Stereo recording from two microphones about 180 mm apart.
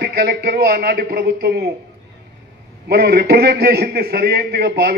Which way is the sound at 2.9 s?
60° right (ahead or behind).